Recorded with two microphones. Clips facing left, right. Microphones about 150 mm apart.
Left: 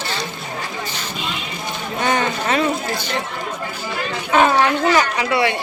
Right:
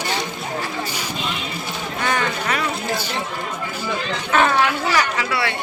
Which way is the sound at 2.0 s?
20° left (ahead or behind).